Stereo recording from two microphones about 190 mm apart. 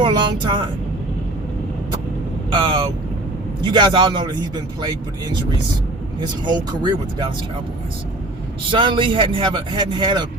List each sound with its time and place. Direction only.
0.0 s a man's voice: 25° right (ahead or behind)
2.5 s a man's voice: 25° right (ahead or behind)
6.1 s a man's voice: 25° right (ahead or behind)
8.7 s a man's voice: 25° right (ahead or behind)